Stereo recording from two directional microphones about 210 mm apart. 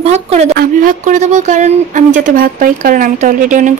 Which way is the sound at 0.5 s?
40° right (ahead or behind).